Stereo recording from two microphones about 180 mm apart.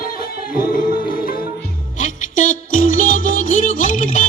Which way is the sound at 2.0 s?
45° left (ahead or behind).